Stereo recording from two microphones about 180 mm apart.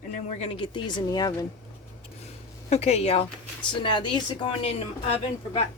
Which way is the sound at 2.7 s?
35° left (ahead or behind).